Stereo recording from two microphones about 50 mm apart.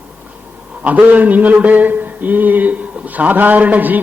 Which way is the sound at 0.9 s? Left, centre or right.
Right.